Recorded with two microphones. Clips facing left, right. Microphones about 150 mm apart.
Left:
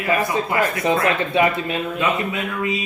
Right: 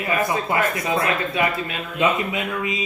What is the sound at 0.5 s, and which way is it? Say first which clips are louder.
Speech: left 2 dB; 25° right (ahead or behind).